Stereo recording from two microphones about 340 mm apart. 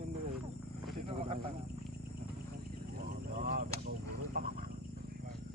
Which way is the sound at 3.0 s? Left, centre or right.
Right.